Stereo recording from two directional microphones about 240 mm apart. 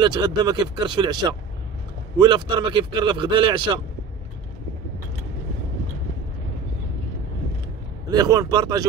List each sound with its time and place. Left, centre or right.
0.0 s speech: centre
8.1 s speech: centre